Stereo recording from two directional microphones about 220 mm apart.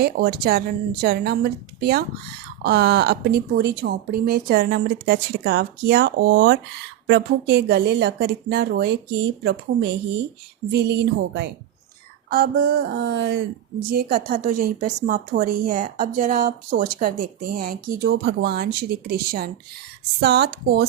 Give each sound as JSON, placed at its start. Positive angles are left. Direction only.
{"t": 0.0, "sound": "a woman's voice", "side_deg": -45}